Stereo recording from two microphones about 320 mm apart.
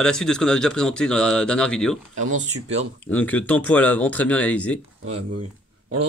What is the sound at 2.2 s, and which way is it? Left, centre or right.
Speech, right.